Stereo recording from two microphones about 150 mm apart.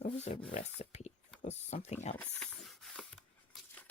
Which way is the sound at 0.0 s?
50° left (ahead or behind).